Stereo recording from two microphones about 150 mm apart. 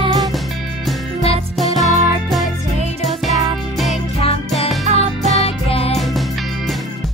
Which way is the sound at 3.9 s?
45° left (ahead or behind).